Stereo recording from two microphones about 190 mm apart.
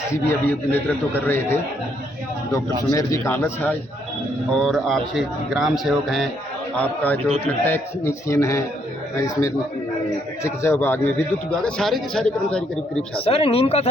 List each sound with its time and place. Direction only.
0.3 s a man's voice: 10° left (ahead or behind)
2.9 s a man's voice: 15° left (ahead or behind)
10.4 s a man's voice: 15° left (ahead or behind)
13.1 s speech: 30° left (ahead or behind)